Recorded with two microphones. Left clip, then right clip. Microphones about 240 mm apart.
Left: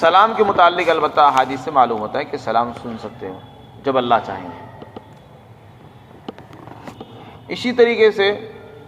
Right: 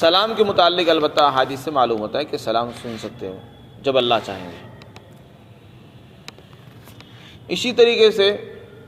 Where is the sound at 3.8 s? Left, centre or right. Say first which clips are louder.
Left 1 dB; right.